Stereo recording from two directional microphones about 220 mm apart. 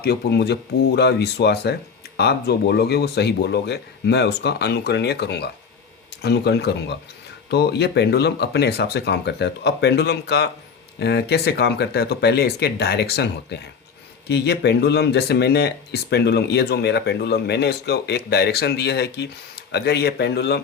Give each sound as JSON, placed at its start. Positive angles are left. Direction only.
{"t": 0.0, "sound": "speech", "side_deg": 50}